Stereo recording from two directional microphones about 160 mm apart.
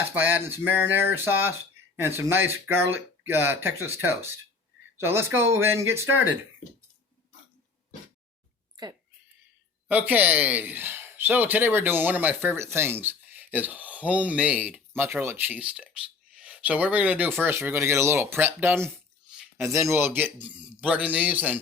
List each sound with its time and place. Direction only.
0.1 s speech: 10° right (ahead or behind)
8.7 s a sound: 25° right (ahead or behind)
9.9 s speech: 10° right (ahead or behind)